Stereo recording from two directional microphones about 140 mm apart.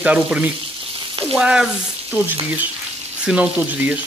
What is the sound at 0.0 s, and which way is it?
Frying, 10° right (ahead or behind).